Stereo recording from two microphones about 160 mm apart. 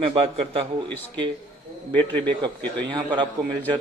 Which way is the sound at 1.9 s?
30° right (ahead or behind).